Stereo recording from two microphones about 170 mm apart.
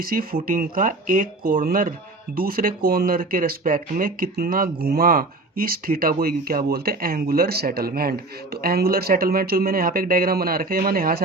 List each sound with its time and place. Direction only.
0.0 s speech: 60° right (ahead or behind)